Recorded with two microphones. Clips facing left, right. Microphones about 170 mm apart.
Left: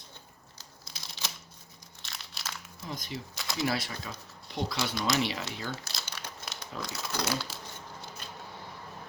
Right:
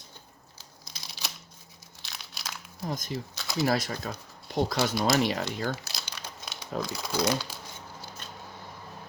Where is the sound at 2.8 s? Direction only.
45° right (ahead or behind).